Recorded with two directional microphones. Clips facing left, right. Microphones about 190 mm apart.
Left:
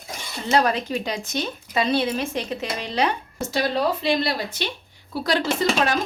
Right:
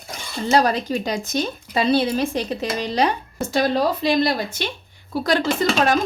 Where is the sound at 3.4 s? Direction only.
50° right (ahead or behind).